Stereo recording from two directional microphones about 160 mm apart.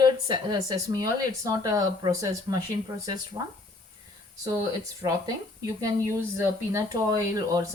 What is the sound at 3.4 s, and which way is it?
Speech, 30° right (ahead or behind).